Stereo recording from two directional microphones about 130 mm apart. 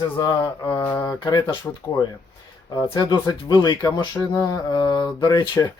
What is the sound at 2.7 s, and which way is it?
Speech, 30° left (ahead or behind).